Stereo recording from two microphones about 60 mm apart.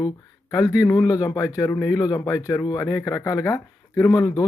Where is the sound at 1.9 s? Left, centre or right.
Left.